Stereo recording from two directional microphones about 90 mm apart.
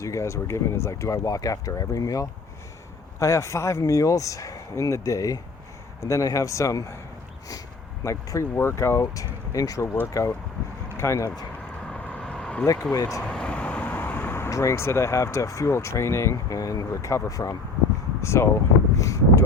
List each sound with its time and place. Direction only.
0.0 s speech: 35° left (ahead or behind)
8.0 s speech: 35° left (ahead or behind)
11.8 s vehicle: 15° left (ahead or behind)
12.6 s speech: 40° left (ahead or behind)
13.2 s speech: 10° left (ahead or behind); by 19.2 s 35° left (ahead or behind)